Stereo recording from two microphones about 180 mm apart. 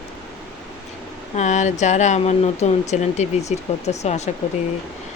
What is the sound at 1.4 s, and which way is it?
Speech, 40° left (ahead or behind).